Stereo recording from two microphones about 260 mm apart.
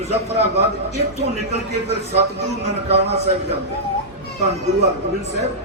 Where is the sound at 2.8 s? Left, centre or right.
Right.